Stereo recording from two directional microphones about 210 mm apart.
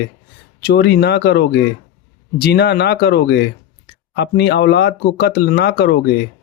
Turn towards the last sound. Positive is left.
turn(degrees=50)  # may be behind; listen again after turning